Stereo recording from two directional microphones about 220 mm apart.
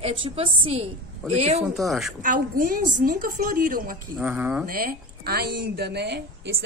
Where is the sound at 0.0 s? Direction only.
25° right (ahead or behind).